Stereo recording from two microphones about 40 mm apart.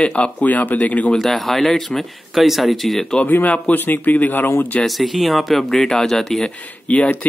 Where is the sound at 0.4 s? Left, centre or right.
Left.